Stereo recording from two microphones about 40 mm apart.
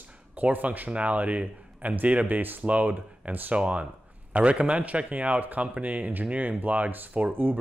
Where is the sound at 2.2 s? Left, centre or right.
Right.